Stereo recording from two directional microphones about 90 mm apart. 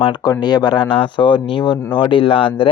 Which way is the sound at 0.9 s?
65° left (ahead or behind).